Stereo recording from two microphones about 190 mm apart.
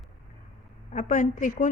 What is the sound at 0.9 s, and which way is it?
Speech, 45° left (ahead or behind).